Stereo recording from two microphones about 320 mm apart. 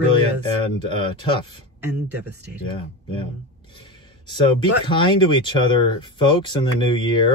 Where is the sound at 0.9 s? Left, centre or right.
Centre.